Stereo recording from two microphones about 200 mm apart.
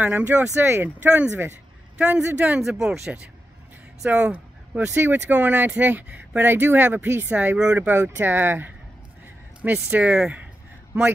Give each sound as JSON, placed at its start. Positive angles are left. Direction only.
{"t": 0.0, "sound": "a man's voice", "side_deg": -10}